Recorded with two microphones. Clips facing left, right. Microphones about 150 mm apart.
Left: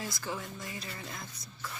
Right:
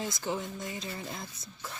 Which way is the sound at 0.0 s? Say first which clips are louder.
Right 4 dB; 20° right (ahead or behind).